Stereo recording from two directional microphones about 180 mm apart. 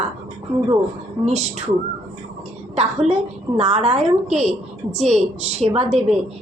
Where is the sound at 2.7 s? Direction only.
35° right (ahead or behind).